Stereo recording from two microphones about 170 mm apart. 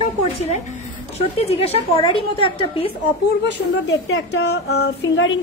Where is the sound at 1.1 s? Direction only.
40° left (ahead or behind).